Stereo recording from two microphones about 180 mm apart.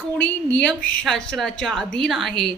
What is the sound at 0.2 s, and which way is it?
A woman's voice, 5° left (ahead or behind).